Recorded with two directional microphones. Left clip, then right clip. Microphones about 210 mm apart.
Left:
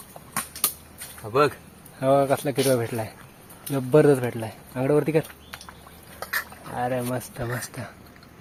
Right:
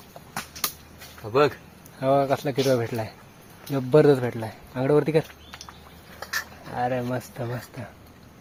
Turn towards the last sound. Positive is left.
turn(degrees=0)  # may be behind; listen again after turning